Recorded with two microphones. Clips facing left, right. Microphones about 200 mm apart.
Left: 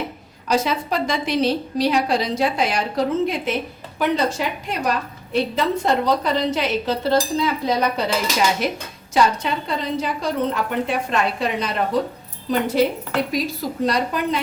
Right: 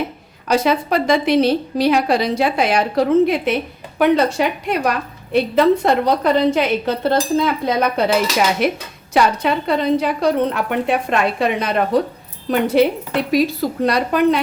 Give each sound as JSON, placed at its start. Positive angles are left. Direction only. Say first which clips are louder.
{"t": 0.4, "sound": "a woman's voice", "louder": "right 4 dB", "side_deg": -60}